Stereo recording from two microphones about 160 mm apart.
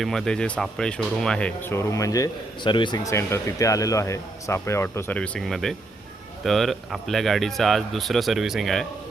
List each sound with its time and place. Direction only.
0.0 s speech: 5° left (ahead or behind)